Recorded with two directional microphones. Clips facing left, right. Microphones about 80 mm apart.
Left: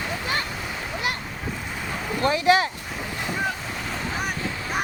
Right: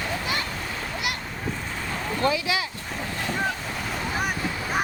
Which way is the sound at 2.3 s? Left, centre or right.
Left.